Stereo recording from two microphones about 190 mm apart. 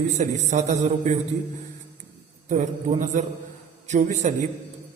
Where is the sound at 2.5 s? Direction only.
40° right (ahead or behind).